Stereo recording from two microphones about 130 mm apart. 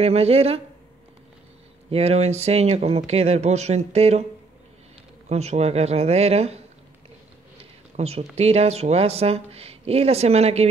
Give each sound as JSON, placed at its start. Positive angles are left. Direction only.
{"t": 0.0, "sound": "speech", "side_deg": -50}
{"t": 1.9, "sound": "speech", "side_deg": -50}
{"t": 5.3, "sound": "speech", "side_deg": -55}